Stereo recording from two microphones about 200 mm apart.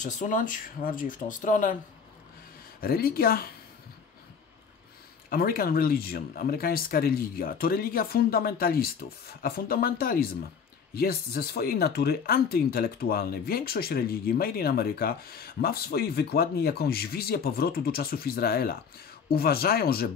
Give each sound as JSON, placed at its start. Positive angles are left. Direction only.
{"t": 0.0, "sound": "speech", "side_deg": 40}
{"t": 2.8, "sound": "speech", "side_deg": 50}
{"t": 5.3, "sound": "speech", "side_deg": 50}